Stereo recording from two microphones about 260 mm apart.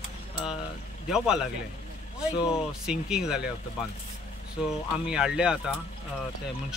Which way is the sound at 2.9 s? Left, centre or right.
Centre.